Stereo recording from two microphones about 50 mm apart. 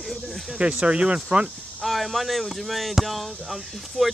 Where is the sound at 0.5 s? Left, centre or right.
Right.